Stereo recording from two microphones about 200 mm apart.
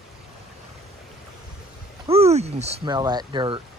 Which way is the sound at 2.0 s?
30° right (ahead or behind).